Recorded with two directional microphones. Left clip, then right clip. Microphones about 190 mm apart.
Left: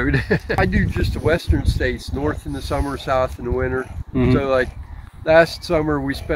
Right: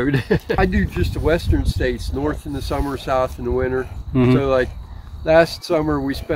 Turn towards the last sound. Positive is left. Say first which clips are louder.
# even
turn(degrees=15)  # may be behind; listen again after turning